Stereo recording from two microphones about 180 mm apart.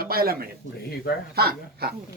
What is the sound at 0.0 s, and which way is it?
Speech, 55° right (ahead or behind).